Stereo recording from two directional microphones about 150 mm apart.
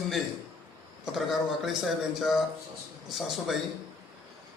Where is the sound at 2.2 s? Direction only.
Centre (ahead or behind).